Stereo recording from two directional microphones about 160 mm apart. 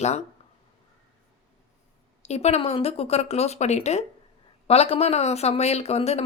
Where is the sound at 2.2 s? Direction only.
40° left (ahead or behind).